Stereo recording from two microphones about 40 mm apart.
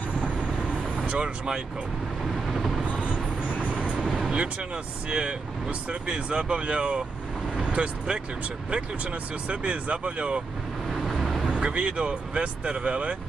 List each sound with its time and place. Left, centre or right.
0.2 s vehicle: right
2.5 s vehicle: centre
3.0 s vehicle: right
4.1 s vehicle: right
5.1 s speech: right
9.5 s speech: right
11.4 s speech: right